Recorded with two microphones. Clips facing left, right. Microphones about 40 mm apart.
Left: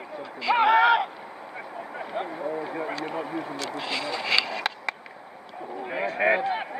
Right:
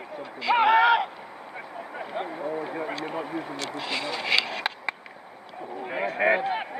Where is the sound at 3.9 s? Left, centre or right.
Right.